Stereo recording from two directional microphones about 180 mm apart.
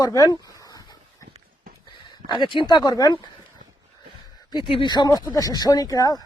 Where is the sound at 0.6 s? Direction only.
20° left (ahead or behind).